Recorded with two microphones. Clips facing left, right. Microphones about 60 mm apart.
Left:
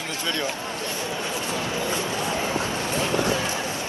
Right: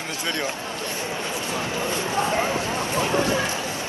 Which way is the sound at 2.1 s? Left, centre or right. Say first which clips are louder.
Right 3 dB; right.